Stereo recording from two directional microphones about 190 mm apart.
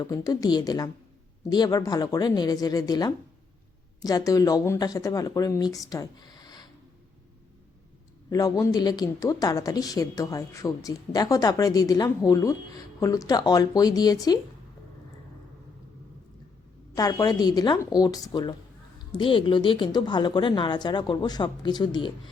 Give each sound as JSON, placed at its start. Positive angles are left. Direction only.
{"t": 0.0, "sound": "speech", "side_deg": 20}
{"t": 8.3, "sound": "speech", "side_deg": 20}
{"t": 16.9, "sound": "speech", "side_deg": 20}